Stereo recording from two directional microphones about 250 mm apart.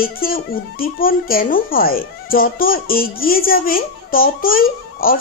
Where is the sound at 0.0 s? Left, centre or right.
Left.